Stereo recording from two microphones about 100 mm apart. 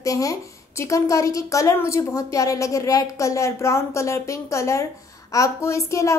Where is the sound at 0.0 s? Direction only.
35° left (ahead or behind).